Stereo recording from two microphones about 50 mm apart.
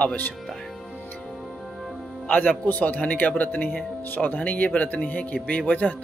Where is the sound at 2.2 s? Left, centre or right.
Left.